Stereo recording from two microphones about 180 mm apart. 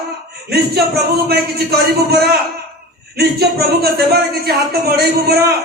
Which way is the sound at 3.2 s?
60° right (ahead or behind).